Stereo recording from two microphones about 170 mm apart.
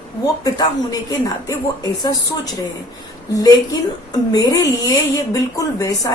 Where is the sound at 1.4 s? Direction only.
20° left (ahead or behind).